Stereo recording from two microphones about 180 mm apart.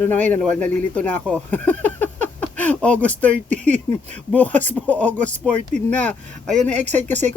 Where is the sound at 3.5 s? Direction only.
40° right (ahead or behind).